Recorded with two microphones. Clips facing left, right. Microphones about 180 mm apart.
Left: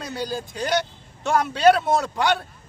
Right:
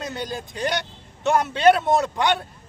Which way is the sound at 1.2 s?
Centre (ahead or behind).